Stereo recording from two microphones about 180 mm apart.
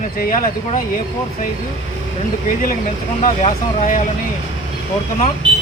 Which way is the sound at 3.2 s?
45° left (ahead or behind).